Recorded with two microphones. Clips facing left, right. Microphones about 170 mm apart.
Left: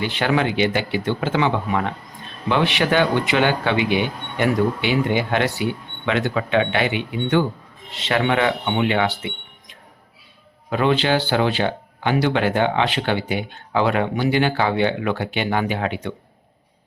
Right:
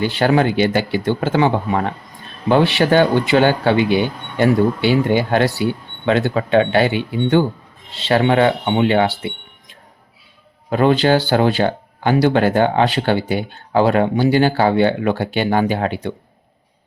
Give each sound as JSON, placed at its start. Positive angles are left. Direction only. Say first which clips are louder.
{"t": 0.0, "sound": "speech", "louder": "right 5 dB", "side_deg": -40}
{"t": 10.7, "sound": "speech", "louder": "right 5 dB", "side_deg": -40}